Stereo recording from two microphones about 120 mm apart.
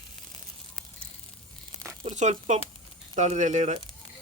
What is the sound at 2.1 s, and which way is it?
Speech, 70° right (ahead or behind).